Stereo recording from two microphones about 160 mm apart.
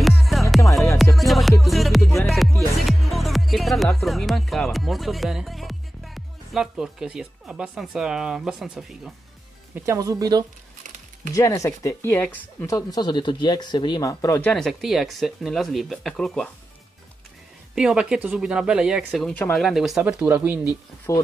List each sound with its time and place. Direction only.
0.0 s music: centre (ahead or behind)
9.8 s speech: 20° right (ahead or behind)
11.3 s speech: 20° left (ahead or behind)
12.7 s speech: 25° left (ahead or behind)
14.4 s speech: centre (ahead or behind)
17.7 s speech: 5° right (ahead or behind)